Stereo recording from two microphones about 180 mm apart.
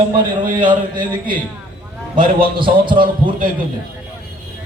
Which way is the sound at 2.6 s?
25° right (ahead or behind).